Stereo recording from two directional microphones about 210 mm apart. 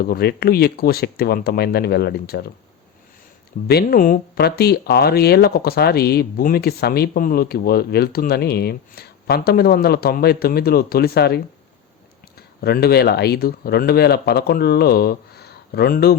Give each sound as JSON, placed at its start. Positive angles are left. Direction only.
{"t": 0.0, "sound": "speech", "side_deg": 50}
{"t": 3.7, "sound": "speech", "side_deg": 45}
{"t": 12.4, "sound": "speech", "side_deg": 50}